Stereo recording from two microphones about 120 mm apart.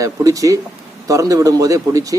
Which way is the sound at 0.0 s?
30° right (ahead or behind).